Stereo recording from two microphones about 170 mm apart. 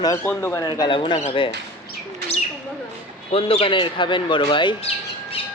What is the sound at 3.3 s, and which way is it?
Speech, 35° left (ahead or behind).